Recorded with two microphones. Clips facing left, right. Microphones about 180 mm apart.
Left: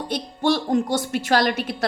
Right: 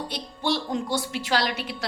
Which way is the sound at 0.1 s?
50° left (ahead or behind).